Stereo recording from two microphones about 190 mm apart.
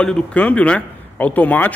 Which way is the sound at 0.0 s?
5° left (ahead or behind).